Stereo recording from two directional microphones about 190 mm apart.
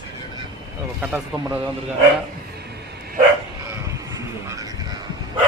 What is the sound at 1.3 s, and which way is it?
Speech, centre (ahead or behind).